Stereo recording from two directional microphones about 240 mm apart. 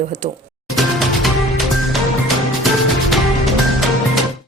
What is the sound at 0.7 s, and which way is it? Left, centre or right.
Music, centre.